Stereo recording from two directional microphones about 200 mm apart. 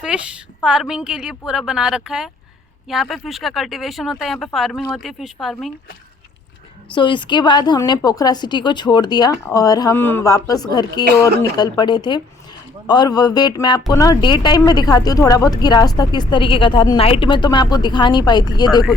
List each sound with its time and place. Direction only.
0.0 s speech: 5° right (ahead or behind)
6.9 s speech: 25° left (ahead or behind)
11.0 s speech: 55° right (ahead or behind)
11.5 s speech: 20° left (ahead or behind)